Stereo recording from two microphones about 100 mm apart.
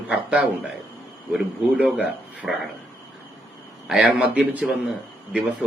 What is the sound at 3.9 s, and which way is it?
Speech, 5° right (ahead or behind).